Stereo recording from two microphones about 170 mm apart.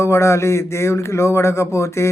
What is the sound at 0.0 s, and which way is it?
Speech, 15° left (ahead or behind).